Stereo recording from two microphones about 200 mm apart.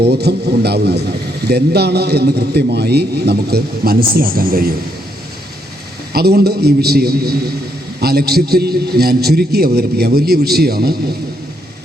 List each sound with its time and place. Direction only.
0.0 s a man's voice: 55° right (ahead or behind)
6.1 s a man's voice: 50° right (ahead or behind)